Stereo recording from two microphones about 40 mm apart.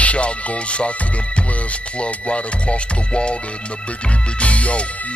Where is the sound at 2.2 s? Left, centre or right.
Left.